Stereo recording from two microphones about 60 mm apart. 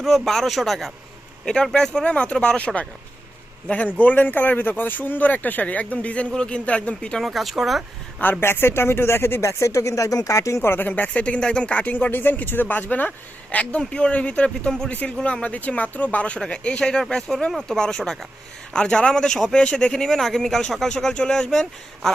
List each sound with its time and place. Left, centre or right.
0.0 s a man's voice: centre
7.2 s a man's voice: centre
8.2 s speech: left
10.6 s speech: left; by 19.5 s centre
19.5 s speech: centre